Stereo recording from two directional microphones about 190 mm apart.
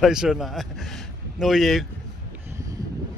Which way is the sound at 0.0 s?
5° right (ahead or behind).